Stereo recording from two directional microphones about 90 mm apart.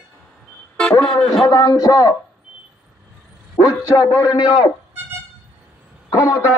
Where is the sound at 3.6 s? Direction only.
55° left (ahead or behind).